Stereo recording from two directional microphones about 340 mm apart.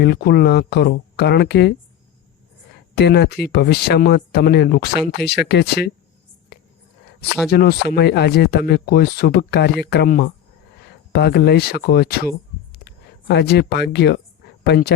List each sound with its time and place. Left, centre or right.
0.0 s speech: left
2.9 s speech: left
7.5 s speech: left